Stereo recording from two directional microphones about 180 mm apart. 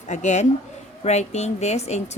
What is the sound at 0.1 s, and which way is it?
Speech, 40° left (ahead or behind).